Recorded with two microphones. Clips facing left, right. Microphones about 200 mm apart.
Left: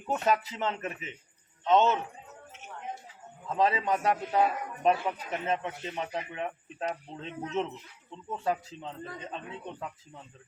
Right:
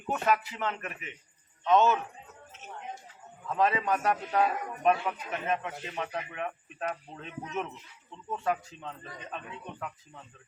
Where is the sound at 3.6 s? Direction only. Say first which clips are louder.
Even; 25° left (ahead or behind).